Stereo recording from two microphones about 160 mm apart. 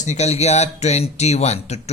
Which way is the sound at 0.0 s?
45° left (ahead or behind).